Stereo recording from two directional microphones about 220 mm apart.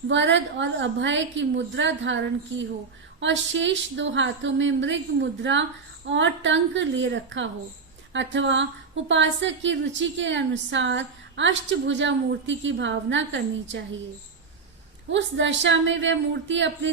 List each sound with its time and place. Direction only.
0.1 s a woman's voice: 55° right (ahead or behind)
15.1 s a woman's voice: 55° right (ahead or behind)